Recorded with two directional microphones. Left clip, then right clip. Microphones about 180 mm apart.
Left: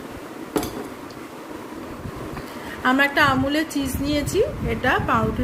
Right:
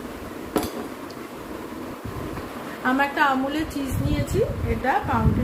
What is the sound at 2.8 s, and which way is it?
Speech, 50° left (ahead or behind).